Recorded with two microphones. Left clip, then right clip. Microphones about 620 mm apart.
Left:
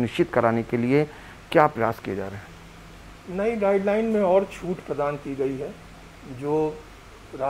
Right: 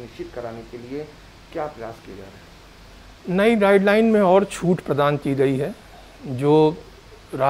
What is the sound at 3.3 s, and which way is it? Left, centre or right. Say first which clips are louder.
Speech: right 6 dB; right.